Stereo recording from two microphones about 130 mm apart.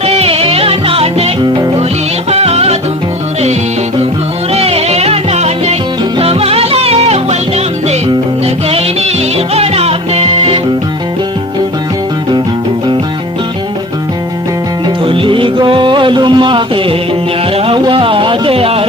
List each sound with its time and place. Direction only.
0.0 s music: 50° right (ahead or behind)
2.3 s music: 50° right (ahead or behind)
4.5 s music: 50° right (ahead or behind)
15.0 s music: 40° right (ahead or behind)
17.6 s a sound: 40° right (ahead or behind)